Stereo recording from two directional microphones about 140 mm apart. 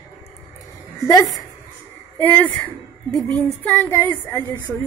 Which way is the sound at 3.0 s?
5° left (ahead or behind).